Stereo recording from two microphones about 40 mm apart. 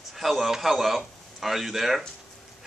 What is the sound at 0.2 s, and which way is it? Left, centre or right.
A man's voice, centre.